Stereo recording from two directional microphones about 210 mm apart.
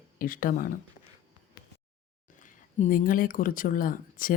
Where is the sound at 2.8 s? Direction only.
40° left (ahead or behind).